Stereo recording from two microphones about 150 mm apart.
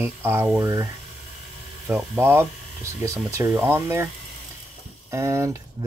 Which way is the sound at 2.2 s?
15° right (ahead or behind).